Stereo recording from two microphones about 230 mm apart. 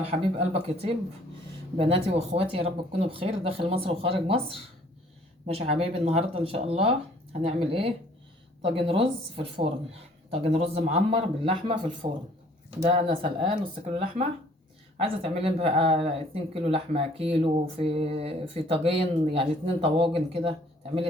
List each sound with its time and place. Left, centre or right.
0.0 s speech: right
5.5 s speech: right